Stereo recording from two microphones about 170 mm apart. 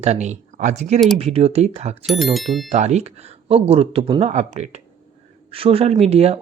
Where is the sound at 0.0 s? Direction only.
40° right (ahead or behind).